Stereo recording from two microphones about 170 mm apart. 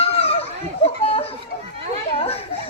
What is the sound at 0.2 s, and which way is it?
Children playing, 35° left (ahead or behind).